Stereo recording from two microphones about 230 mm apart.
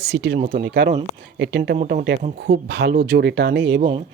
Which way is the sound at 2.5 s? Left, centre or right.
Right.